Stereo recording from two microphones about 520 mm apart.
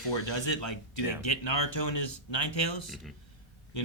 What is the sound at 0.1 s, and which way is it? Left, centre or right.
Speech, left.